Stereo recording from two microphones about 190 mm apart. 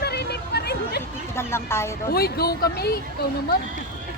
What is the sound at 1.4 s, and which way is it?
Speech, 15° left (ahead or behind).